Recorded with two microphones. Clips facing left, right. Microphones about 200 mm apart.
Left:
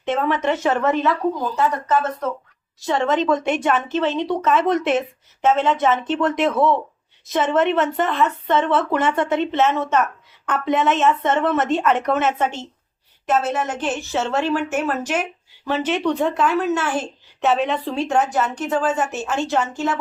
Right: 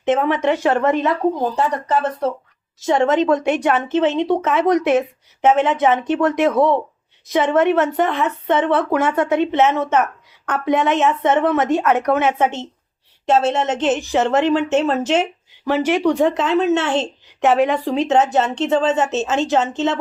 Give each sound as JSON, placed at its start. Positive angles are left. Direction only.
{"t": 0.0, "sound": "a woman's voice", "side_deg": -20}
{"t": 1.4, "sound": "speech", "side_deg": -35}
{"t": 2.8, "sound": "a woman's voice", "side_deg": -15}
{"t": 15.6, "sound": "a woman's voice", "side_deg": -10}
{"t": 17.5, "sound": "speech", "side_deg": -10}